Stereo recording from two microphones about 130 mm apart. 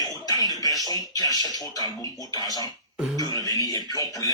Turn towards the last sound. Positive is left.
turn(degrees=25)  # may be behind; listen again after turning